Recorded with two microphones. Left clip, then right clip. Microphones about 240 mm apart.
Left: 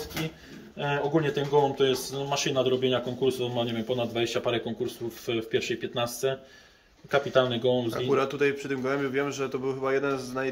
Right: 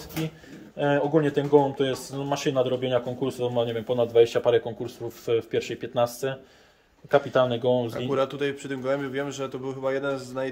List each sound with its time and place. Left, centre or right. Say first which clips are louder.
0.7 s speech: right 4 dB; right
7.9 s a man's voice: even; centre